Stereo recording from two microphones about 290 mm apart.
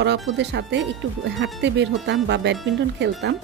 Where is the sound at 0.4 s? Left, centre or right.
Right.